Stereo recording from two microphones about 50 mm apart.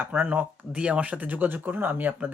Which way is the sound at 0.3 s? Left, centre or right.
Right.